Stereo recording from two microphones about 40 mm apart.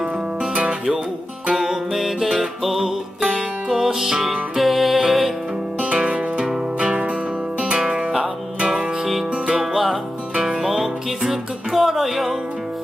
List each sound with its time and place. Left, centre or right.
0.0 s music: right
1.5 s music: centre
5.8 s music: right
9.6 s music: centre
10.3 s music: centre
10.6 s music: centre